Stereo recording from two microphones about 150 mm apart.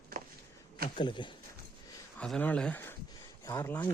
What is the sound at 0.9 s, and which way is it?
Speech, 30° left (ahead or behind).